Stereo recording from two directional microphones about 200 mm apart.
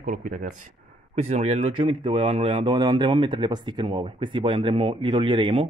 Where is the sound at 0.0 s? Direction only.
45° right (ahead or behind).